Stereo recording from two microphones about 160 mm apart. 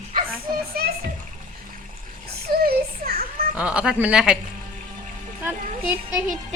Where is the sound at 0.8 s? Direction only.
70° right (ahead or behind).